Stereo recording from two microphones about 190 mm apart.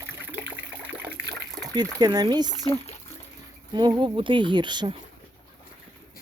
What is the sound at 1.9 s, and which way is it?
Speech, 20° right (ahead or behind).